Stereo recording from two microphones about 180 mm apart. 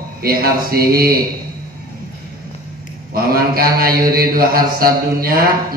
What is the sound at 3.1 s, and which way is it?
Mantra, 55° right (ahead or behind).